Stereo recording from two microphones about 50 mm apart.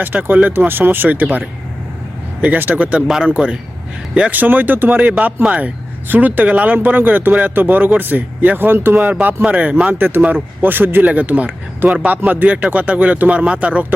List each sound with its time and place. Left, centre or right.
0.0 s speech: right
4.3 s speech: right
9.2 s speech: right
9.8 s speech: right
11.0 s speech: right